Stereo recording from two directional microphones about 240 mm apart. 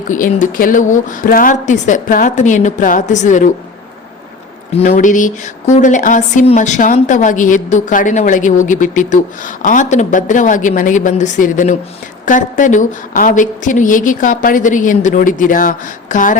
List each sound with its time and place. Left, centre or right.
0.1 s speech: left
4.7 s speech: left